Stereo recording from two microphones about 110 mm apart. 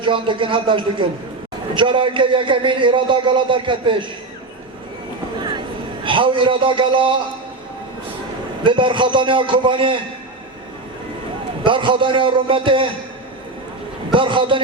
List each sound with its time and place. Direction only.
0.0 s a man's voice: 50° right (ahead or behind)
6.1 s a man's voice: 50° right (ahead or behind)
8.6 s a man's voice: 50° right (ahead or behind)
11.6 s a man's voice: 50° right (ahead or behind)
14.1 s a man's voice: 50° right (ahead or behind)